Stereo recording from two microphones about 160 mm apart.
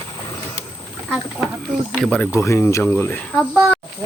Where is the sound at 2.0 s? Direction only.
10° left (ahead or behind).